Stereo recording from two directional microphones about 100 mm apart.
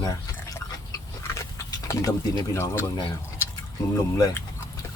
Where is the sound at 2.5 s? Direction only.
25° left (ahead or behind).